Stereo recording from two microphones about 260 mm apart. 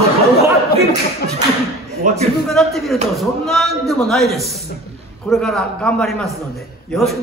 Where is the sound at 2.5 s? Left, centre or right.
Centre.